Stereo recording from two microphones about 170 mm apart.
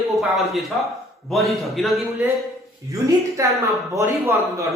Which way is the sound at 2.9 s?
20° right (ahead or behind).